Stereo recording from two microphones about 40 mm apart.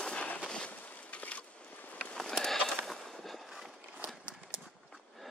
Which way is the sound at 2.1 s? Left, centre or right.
Centre.